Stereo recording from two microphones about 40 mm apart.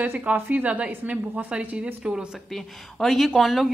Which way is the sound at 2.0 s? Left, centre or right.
Right.